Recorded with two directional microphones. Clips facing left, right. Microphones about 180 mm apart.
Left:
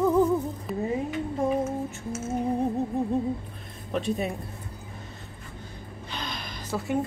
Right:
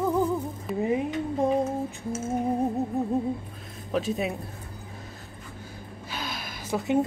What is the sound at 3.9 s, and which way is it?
Speech, centre (ahead or behind).